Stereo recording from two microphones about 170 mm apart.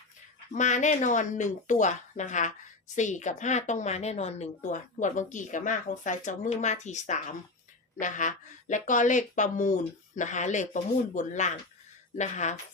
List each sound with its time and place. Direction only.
0.5 s a woman's voice: 45° left (ahead or behind)